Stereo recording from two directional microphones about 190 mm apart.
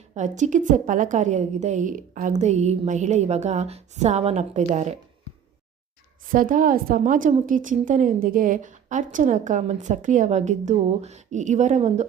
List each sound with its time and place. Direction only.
0.1 s a woman's voice: 40° right (ahead or behind)
6.3 s a woman's voice: 45° right (ahead or behind)